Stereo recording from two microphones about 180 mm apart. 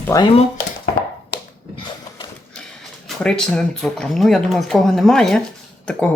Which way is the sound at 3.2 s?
5° left (ahead or behind).